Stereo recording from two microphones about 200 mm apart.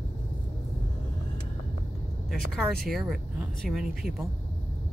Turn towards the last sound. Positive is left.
turn(degrees=0)  # may be behind; listen again after turning